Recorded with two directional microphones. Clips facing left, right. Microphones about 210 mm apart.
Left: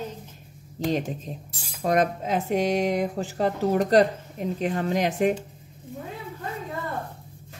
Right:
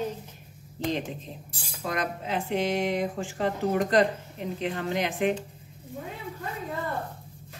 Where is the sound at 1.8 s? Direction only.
45° left (ahead or behind).